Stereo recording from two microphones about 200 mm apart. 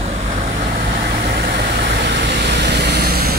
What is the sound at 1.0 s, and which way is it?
Vehicle, 50° right (ahead or behind).